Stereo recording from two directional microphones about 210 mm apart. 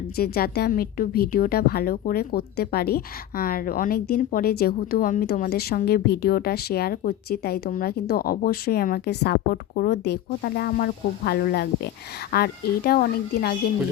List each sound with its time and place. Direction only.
0.2 s a woman's voice: 45° left (ahead or behind)